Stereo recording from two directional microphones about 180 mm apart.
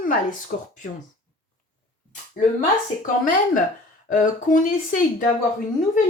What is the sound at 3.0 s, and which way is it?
Speech, 50° left (ahead or behind).